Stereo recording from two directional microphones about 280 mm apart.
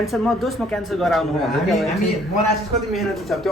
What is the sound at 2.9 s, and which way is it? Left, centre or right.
Speech, centre.